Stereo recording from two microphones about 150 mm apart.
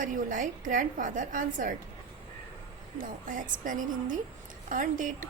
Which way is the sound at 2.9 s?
65° right (ahead or behind).